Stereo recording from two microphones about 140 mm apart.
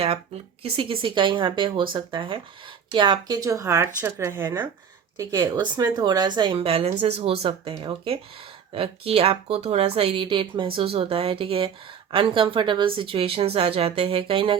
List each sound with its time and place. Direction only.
0.6 s a woman's voice: 40° right (ahead or behind)